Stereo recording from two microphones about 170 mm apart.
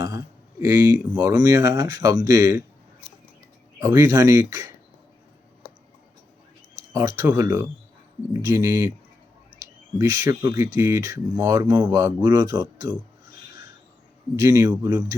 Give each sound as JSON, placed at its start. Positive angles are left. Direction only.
{"t": 0.6, "sound": "speech", "side_deg": -20}
{"t": 3.8, "sound": "speech", "side_deg": -20}
{"t": 6.9, "sound": "speech", "side_deg": -20}
{"t": 10.0, "sound": "speech", "side_deg": -20}
{"t": 14.3, "sound": "a man's voice", "side_deg": -15}